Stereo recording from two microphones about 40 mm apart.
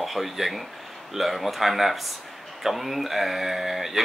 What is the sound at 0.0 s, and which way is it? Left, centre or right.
Speech, centre.